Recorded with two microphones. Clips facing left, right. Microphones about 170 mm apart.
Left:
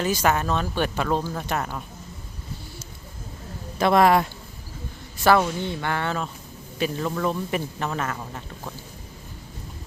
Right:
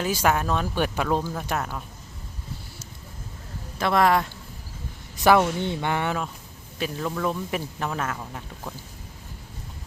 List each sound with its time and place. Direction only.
0.0 s speech: 10° right (ahead or behind)
3.8 s a man's voice: 15° left (ahead or behind)
5.2 s speech: 15° right (ahead or behind)
6.7 s speech: centre (ahead or behind)